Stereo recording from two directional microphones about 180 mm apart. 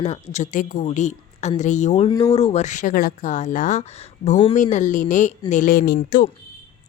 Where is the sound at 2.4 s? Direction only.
35° left (ahead or behind).